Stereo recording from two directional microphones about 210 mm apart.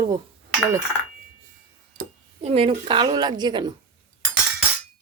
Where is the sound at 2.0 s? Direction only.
30° right (ahead or behind).